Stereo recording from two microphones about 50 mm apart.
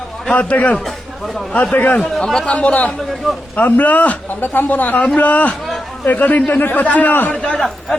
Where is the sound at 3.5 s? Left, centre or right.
Left.